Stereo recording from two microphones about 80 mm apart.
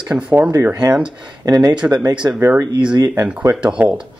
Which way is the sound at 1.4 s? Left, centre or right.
Right.